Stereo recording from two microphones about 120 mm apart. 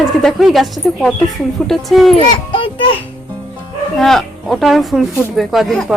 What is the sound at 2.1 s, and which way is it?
Speech, 45° left (ahead or behind).